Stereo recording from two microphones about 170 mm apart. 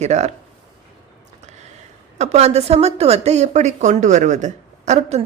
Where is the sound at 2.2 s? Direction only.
40° right (ahead or behind).